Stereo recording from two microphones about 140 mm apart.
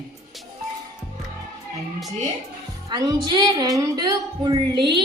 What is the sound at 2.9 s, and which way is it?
A woman's voice, 30° right (ahead or behind).